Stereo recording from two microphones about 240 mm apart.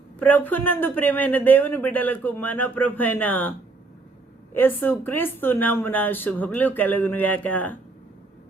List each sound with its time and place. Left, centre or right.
0.2 s a man's voice: centre
4.5 s a man's voice: centre